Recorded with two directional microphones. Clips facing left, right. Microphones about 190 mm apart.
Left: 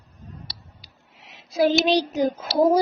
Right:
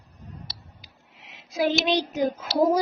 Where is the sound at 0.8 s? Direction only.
40° left (ahead or behind).